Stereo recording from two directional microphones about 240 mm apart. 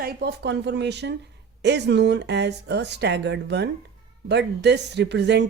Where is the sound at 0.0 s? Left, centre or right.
Right.